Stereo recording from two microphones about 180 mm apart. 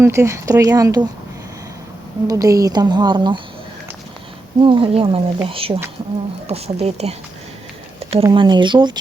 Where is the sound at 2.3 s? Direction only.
20° right (ahead or behind).